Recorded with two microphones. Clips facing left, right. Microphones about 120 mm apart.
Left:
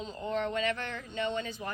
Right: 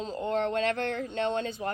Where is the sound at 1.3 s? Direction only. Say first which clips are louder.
Right 5 dB; 40° right (ahead or behind).